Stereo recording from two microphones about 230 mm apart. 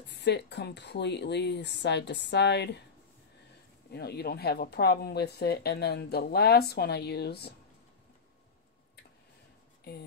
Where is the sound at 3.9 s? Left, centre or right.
Left.